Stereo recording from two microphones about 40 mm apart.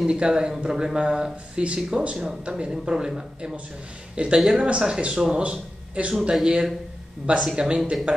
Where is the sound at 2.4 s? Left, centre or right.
Right; by 4.6 s centre.